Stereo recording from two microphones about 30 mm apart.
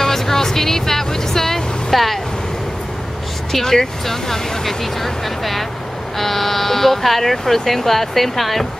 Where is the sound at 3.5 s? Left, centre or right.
Centre.